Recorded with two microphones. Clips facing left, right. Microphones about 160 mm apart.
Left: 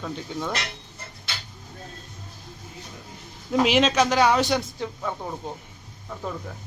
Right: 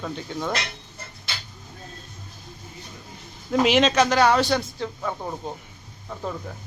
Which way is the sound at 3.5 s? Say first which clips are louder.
Right 1 dB; centre (ahead or behind).